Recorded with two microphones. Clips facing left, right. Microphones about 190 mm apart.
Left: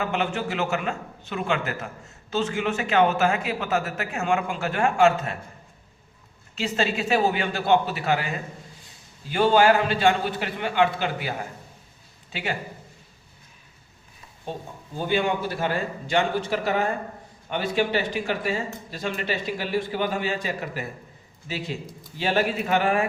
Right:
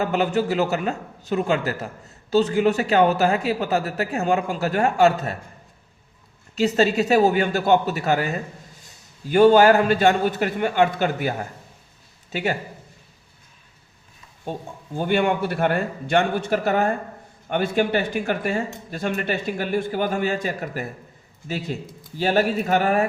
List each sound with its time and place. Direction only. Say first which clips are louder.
0.0 s a man's voice: right 5 dB; 40° right (ahead or behind)
6.6 s a man's voice: right 7 dB; 40° right (ahead or behind)
14.9 s a man's voice: right 3 dB; 55° right (ahead or behind)